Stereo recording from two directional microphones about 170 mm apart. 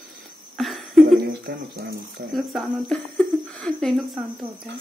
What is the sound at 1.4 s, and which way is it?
Speech, 65° right (ahead or behind).